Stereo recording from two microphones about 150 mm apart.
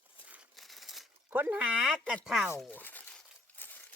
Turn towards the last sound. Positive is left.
turn(degrees=10)  # may be behind; listen again after turning